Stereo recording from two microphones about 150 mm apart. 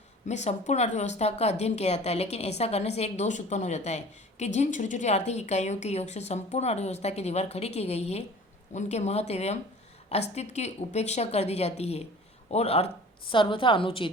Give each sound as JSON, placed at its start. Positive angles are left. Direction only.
{"t": 0.3, "sound": "a woman's voice", "side_deg": 50}